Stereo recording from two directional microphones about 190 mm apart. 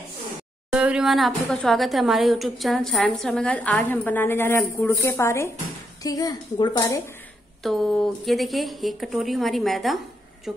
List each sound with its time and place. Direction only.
0.7 s a woman's voice: 5° right (ahead or behind); by 7.0 s 20° left (ahead or behind)
7.6 s a woman's voice: centre (ahead or behind)